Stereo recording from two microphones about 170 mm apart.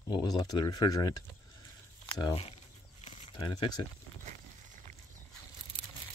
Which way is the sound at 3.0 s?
30° left (ahead or behind).